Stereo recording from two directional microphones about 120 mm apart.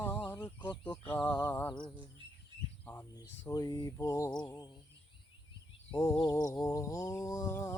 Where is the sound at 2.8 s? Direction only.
15° left (ahead or behind).